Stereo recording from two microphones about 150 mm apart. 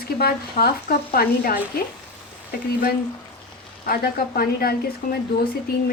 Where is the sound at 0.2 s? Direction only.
90° left.